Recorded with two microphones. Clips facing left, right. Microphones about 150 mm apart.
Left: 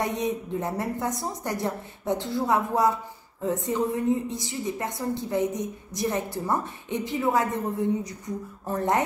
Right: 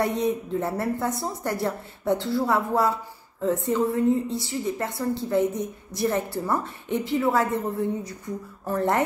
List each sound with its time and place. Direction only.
0.0 s a woman's voice: 15° left (ahead or behind)